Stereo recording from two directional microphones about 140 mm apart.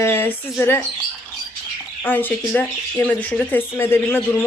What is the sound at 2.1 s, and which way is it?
Speech, 10° left (ahead or behind).